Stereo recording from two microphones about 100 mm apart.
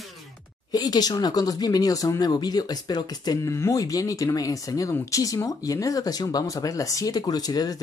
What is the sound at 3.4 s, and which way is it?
Speech, 30° left (ahead or behind).